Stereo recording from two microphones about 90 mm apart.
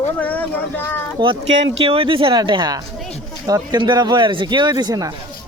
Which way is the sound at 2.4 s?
55° right (ahead or behind).